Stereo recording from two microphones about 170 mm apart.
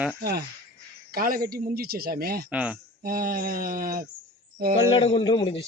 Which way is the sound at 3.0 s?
60° right (ahead or behind).